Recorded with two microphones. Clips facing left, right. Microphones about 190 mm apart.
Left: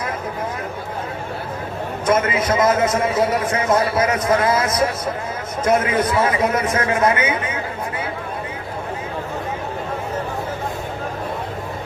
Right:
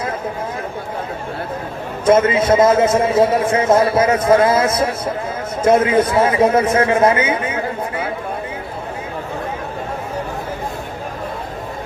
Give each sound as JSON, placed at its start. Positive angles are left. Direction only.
{"t": 2.0, "sound": "a man's voice", "side_deg": -30}